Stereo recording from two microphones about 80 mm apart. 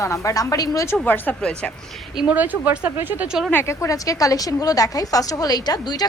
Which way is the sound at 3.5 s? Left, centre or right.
Left.